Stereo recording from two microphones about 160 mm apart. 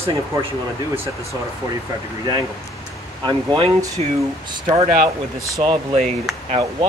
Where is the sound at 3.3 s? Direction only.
30° right (ahead or behind).